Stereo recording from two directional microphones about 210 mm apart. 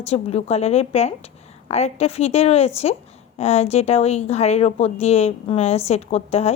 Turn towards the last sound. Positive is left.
turn(degrees=30)  # may be behind; listen again after turning